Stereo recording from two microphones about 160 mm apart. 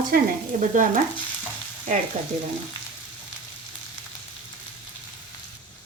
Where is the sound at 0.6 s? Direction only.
55° right (ahead or behind).